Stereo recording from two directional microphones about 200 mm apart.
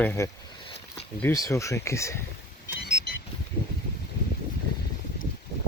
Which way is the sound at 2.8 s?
60° left (ahead or behind).